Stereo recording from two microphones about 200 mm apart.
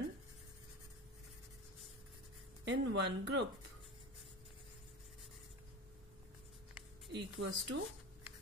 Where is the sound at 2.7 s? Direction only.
60° right (ahead or behind).